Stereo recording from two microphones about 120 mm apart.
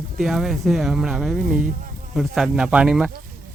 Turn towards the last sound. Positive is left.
turn(degrees=-5)  # may be behind; listen again after turning